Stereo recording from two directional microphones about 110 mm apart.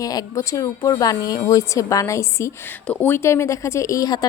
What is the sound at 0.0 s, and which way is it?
A woman's voice, 35° left (ahead or behind).